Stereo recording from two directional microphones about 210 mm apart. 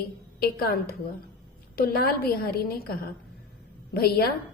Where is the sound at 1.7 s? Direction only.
45° left (ahead or behind).